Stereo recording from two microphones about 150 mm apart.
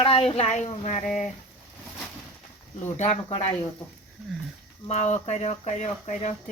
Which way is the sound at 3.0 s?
40° left (ahead or behind).